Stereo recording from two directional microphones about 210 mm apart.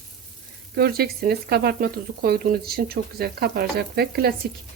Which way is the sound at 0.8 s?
50° right (ahead or behind).